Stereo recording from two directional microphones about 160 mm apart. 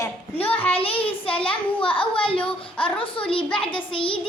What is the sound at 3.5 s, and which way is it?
Child singing, 30° left (ahead or behind).